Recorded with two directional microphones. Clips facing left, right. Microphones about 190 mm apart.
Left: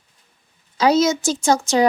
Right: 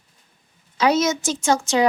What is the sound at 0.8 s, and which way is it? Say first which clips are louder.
Speech: left 3 dB; 35° left (ahead or behind).